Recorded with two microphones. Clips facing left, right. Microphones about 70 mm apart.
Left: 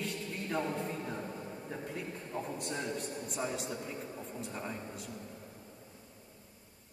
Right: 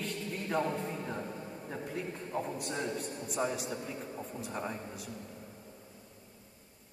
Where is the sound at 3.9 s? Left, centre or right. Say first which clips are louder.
Right 1 dB; centre.